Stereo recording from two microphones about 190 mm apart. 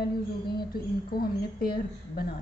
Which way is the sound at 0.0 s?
55° left (ahead or behind).